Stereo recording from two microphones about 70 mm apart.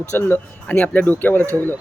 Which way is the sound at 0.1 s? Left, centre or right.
Left.